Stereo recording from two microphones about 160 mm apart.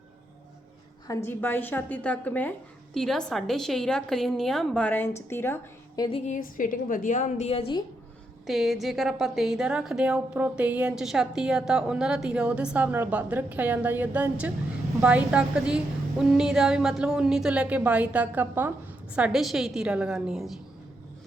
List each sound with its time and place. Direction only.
1.0 s a woman's voice: 15° left (ahead or behind)
6.0 s a woman's voice: 35° left (ahead or behind)
8.4 s a woman's voice: centre (ahead or behind)